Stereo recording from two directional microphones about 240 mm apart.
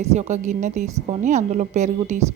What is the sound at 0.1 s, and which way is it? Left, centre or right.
Speech, right.